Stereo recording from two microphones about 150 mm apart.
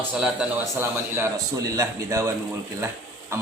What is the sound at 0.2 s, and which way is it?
A man's voice, 10° right (ahead or behind).